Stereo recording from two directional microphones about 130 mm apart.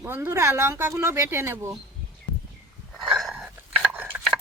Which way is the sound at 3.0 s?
Centre (ahead or behind).